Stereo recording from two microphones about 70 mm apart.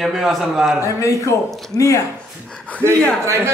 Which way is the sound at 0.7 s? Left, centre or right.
Left.